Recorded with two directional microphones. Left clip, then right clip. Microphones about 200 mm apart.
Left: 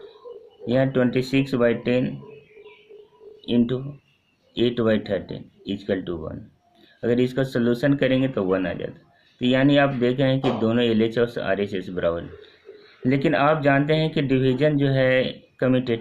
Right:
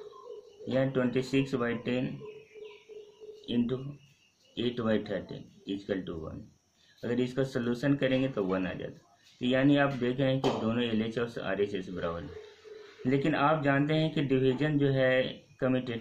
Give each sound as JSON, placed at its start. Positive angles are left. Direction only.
{"t": 0.7, "sound": "speech", "side_deg": 50}
{"t": 3.4, "sound": "speech", "side_deg": 45}